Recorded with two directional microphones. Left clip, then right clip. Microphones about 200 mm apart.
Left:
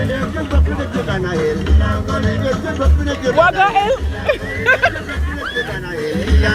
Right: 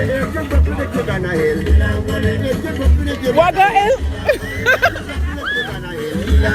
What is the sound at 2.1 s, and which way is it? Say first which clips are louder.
Music: left 1 dB; 45° right (ahead or behind).